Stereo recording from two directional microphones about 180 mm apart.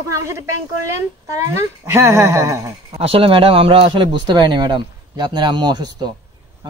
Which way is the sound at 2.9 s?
30° right (ahead or behind).